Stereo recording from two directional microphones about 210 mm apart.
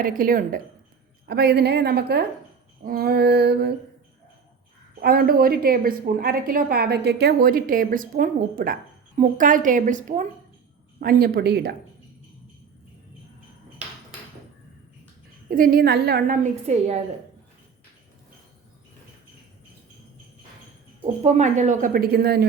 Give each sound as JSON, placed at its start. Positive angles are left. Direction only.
{"t": 0.0, "sound": "a woman's voice", "side_deg": -40}
{"t": 4.9, "sound": "a woman's voice", "side_deg": -45}
{"t": 15.4, "sound": "a woman's voice", "side_deg": -40}
{"t": 21.2, "sound": "a woman's voice", "side_deg": -35}